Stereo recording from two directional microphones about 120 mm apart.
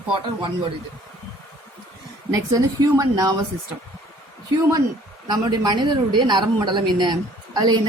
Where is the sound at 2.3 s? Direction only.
30° right (ahead or behind).